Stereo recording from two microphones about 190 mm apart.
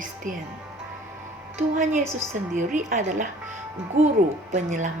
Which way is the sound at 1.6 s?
40° right (ahead or behind).